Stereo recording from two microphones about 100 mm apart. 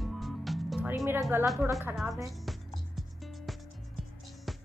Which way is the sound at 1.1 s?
25° right (ahead or behind).